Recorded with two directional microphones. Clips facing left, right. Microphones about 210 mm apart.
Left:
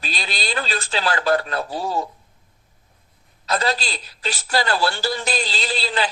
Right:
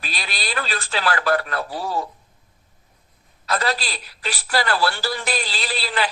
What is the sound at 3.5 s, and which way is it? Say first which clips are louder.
A man's voice: left 1 dB; 25° left (ahead or behind).